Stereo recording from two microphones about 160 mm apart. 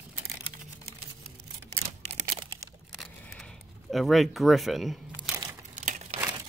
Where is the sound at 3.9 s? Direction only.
Centre (ahead or behind).